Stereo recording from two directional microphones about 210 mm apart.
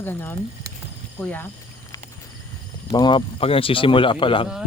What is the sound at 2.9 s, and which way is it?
Speech, 20° left (ahead or behind).